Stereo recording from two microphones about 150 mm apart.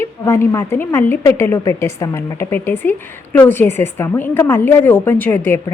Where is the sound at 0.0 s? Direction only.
15° left (ahead or behind).